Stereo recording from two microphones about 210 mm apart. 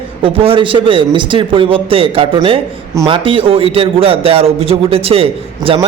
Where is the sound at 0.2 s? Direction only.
25° right (ahead or behind).